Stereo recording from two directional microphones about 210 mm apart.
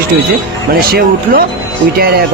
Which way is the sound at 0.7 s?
45° right (ahead or behind).